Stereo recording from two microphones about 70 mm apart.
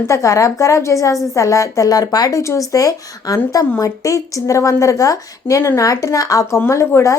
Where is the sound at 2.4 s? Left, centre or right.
Left.